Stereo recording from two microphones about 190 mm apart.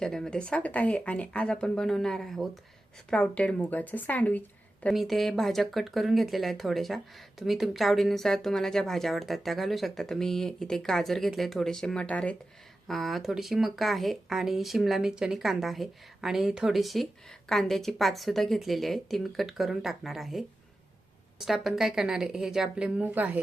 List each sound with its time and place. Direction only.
0.0 s a woman's voice: 5° left (ahead or behind)